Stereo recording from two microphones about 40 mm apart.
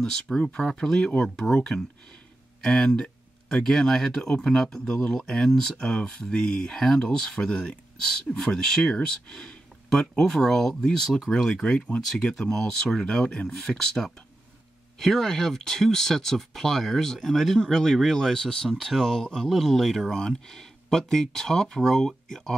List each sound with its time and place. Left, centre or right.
0.0 s speech: centre
1.5 s speech: left
2.7 s a sound: centre
3.6 s speech: centre
5.8 s speech: left